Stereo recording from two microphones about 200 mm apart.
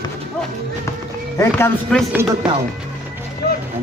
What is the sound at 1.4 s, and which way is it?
Speech, 10° left (ahead or behind).